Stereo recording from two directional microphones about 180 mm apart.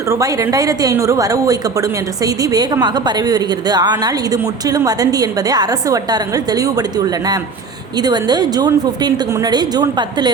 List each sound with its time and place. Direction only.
0.1 s a woman's voice: 15° right (ahead or behind)